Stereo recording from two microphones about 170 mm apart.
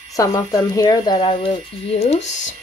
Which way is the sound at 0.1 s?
20° left (ahead or behind).